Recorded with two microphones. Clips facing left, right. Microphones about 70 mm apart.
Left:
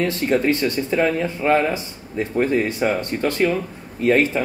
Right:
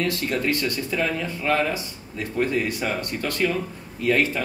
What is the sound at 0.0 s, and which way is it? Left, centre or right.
Speech, left.